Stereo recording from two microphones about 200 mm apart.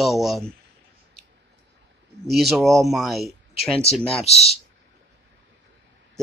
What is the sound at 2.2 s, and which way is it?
Speech, centre (ahead or behind).